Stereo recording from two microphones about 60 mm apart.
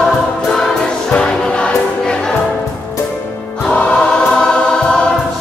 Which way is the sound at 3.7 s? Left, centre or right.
Centre.